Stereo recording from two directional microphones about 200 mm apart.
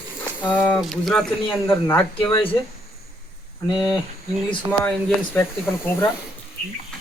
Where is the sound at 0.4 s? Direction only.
5° left (ahead or behind).